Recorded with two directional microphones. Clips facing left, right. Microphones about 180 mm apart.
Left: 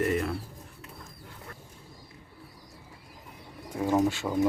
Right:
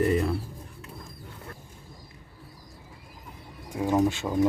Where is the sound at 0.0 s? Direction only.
35° right (ahead or behind).